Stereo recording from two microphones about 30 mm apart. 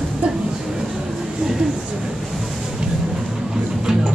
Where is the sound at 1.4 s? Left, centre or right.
Right.